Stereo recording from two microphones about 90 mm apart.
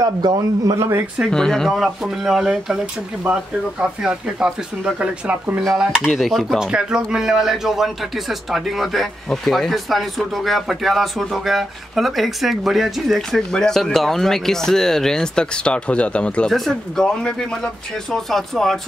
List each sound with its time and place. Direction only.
0.0 s a man's voice: 45° right (ahead or behind)
0.7 s speech: 35° right (ahead or behind)
1.3 s speech: 5° left (ahead or behind)
1.8 s speech: 5° right (ahead or behind)
5.6 s a man's voice: centre (ahead or behind)